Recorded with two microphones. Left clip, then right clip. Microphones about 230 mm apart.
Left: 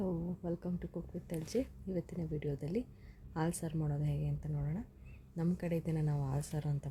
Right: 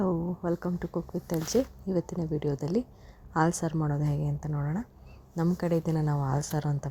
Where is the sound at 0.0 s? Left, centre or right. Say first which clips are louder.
Right 10 dB; centre.